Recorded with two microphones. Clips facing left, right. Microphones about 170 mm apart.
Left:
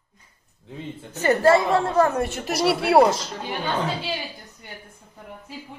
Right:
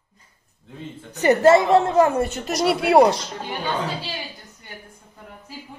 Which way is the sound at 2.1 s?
Centre (ahead or behind).